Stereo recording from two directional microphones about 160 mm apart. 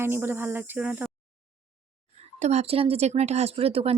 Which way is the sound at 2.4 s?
45° right (ahead or behind).